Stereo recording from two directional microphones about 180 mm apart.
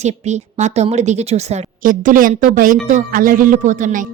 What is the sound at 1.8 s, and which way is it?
Speech, 50° right (ahead or behind).